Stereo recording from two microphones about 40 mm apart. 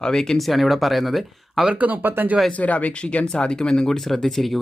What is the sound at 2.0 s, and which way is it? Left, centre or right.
Speech, right.